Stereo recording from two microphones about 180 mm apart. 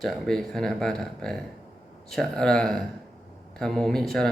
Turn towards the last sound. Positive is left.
turn(degrees=0)  # may be behind; listen again after turning